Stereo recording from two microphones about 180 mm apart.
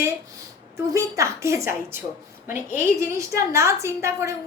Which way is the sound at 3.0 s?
15° right (ahead or behind).